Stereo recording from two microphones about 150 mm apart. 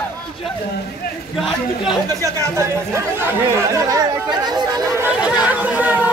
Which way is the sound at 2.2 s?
20° right (ahead or behind).